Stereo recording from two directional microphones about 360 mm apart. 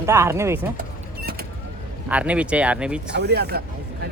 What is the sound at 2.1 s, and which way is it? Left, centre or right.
Speech, centre.